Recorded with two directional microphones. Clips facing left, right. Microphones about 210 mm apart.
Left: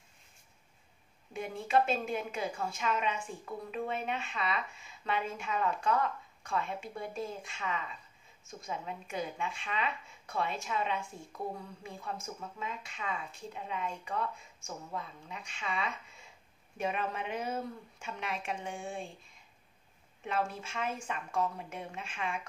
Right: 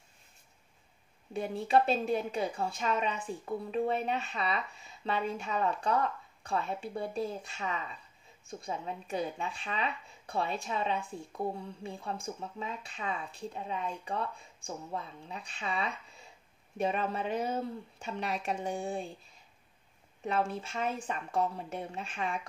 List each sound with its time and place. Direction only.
1.3 s a woman's voice: 35° right (ahead or behind)
20.2 s a woman's voice: 35° right (ahead or behind)